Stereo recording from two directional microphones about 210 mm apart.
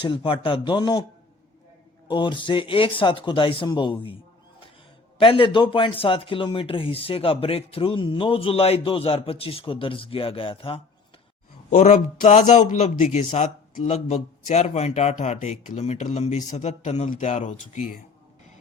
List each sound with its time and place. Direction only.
0.0 s speech: 25° left (ahead or behind)
2.0 s speech: 25° left (ahead or behind)
5.2 s speech: 25° left (ahead or behind)
11.7 s speech: 35° left (ahead or behind)